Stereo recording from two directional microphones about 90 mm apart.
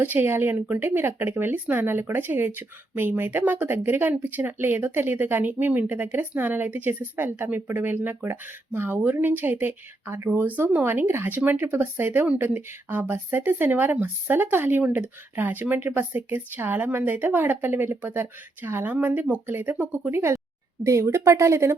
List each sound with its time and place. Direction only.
0.0 s speech: 25° right (ahead or behind)